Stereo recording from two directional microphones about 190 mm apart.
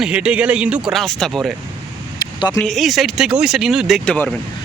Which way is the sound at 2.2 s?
20° left (ahead or behind).